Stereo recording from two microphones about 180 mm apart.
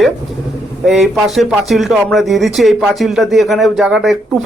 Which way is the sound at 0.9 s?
Centre (ahead or behind).